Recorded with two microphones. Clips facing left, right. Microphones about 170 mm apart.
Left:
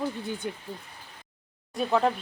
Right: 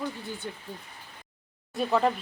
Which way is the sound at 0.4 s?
15° left (ahead or behind).